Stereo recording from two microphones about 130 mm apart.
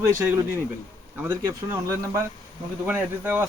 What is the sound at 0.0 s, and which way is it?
Speech, 20° right (ahead or behind).